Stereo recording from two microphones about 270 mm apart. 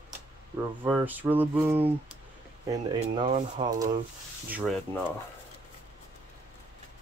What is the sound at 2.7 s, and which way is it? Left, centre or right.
Speech, centre.